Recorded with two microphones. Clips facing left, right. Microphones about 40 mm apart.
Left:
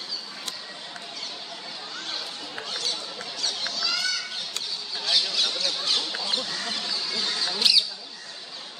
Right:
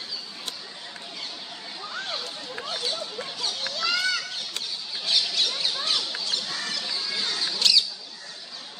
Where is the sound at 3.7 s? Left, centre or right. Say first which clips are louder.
Right 5 dB; right.